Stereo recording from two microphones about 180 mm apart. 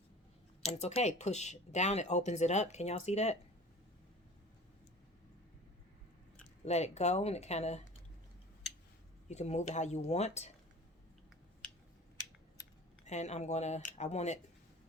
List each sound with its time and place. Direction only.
0.6 s speech: 35° left (ahead or behind)
6.7 s speech: 40° left (ahead or behind)
9.3 s speech: 40° left (ahead or behind)
13.1 s speech: 40° left (ahead or behind)